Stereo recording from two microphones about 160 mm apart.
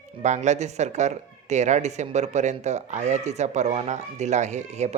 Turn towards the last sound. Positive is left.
turn(degrees=-45)  # may be behind; listen again after turning